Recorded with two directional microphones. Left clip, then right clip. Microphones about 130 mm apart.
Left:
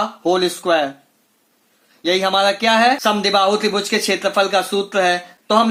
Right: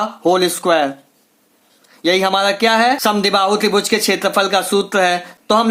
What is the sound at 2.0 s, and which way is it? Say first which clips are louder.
Speech: right 2 dB; 30° right (ahead or behind).